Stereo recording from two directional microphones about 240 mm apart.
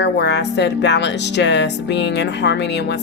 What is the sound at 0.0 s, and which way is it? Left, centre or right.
A woman's voice, left.